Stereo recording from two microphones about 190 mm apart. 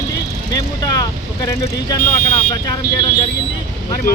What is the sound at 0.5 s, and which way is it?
Speech, 20° left (ahead or behind).